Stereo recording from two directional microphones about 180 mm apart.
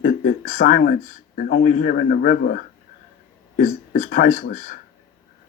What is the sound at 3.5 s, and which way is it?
Speech, 45° left (ahead or behind).